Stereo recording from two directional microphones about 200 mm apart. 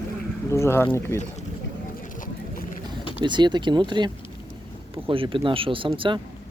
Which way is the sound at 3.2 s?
20° right (ahead or behind).